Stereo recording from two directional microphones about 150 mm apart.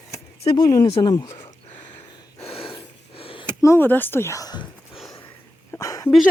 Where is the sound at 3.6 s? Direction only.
15° left (ahead or behind).